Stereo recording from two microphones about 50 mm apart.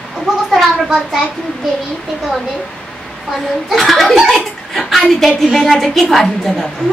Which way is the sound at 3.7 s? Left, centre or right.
Centre.